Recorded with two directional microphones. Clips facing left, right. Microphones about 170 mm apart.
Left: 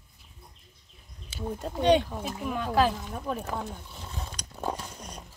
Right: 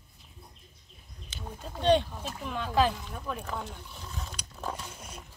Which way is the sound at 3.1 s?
40° left (ahead or behind).